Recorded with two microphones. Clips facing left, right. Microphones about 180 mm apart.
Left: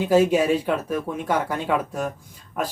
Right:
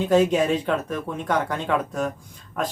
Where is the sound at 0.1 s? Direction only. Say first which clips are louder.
Left 1 dB; 10° left (ahead or behind).